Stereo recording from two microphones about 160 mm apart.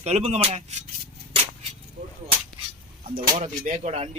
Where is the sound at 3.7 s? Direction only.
40° right (ahead or behind).